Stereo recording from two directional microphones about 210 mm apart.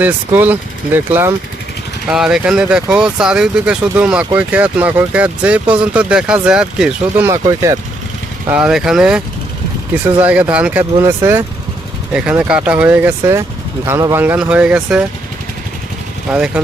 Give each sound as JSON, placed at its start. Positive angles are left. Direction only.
{"t": 0.0, "sound": "speech", "side_deg": -10}
{"t": 7.3, "sound": "speech", "side_deg": -15}
{"t": 16.3, "sound": "speech", "side_deg": -5}